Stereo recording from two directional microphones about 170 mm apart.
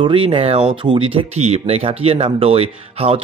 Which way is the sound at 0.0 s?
30° right (ahead or behind).